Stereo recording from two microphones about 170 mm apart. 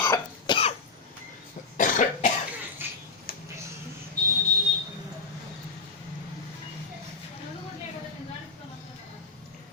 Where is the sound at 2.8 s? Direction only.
10° right (ahead or behind).